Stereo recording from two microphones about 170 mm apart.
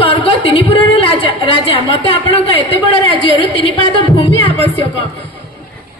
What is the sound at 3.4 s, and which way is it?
A woman's voice, 30° left (ahead or behind).